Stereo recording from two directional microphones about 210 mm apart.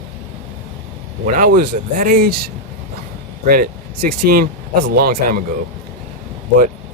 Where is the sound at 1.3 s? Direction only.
40° right (ahead or behind).